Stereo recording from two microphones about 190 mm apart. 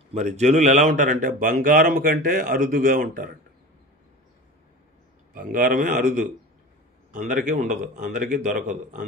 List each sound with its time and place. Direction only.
0.1 s a man's voice: 35° right (ahead or behind)
5.3 s a man's voice: 45° right (ahead or behind)